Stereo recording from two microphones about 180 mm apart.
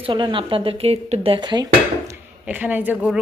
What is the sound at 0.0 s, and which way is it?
A woman's voice, 30° right (ahead or behind).